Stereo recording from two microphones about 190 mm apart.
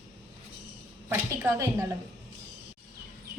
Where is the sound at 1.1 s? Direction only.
15° right (ahead or behind).